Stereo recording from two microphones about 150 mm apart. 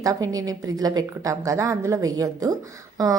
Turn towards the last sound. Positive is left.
turn(degrees=-25)  # may be behind; listen again after turning